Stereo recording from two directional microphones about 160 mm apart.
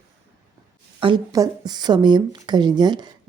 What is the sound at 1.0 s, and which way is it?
Speech, 25° right (ahead or behind).